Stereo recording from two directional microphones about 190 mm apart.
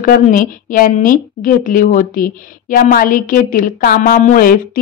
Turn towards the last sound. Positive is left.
turn(degrees=45)  # may be behind; listen again after turning